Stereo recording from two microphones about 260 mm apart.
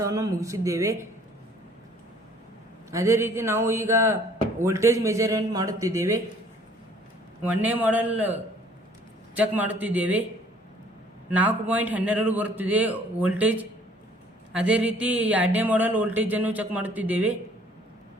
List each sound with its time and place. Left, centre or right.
0.0 s speech: centre
2.9 s speech: centre
7.4 s speech: centre
11.3 s speech: centre